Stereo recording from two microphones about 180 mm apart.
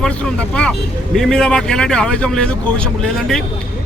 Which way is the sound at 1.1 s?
5° left (ahead or behind).